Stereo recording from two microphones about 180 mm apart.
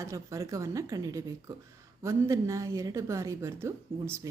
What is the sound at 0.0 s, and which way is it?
A woman's voice, 15° right (ahead or behind).